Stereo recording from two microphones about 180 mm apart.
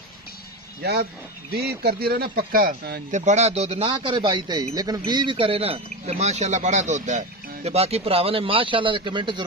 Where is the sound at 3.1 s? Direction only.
40° right (ahead or behind).